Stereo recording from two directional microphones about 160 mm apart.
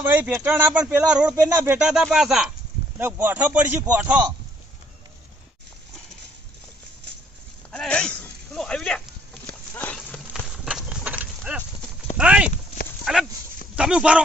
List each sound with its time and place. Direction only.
0.0 s speech: 10° right (ahead or behind)
1.9 s speech: 5° right (ahead or behind)
7.7 s a sound: 5° left (ahead or behind)
12.1 s clip-clop: 5° right (ahead or behind)
13.1 s speech: 5° right (ahead or behind)